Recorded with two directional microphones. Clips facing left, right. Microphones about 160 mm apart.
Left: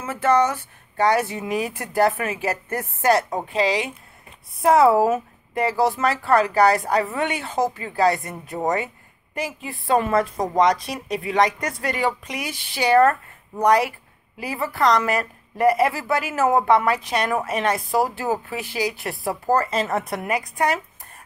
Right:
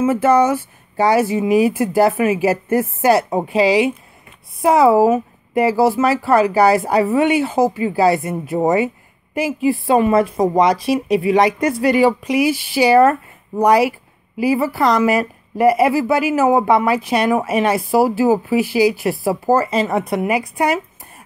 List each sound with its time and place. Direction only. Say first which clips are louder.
0.0 s speech: right 6 dB; 10° right (ahead or behind)
10.3 s speech: right 8 dB; 20° right (ahead or behind)
10.6 s a woman's voice: right 1 dB; 5° right (ahead or behind)